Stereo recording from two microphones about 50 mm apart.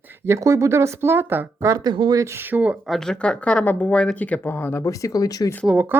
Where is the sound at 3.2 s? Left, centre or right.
Centre.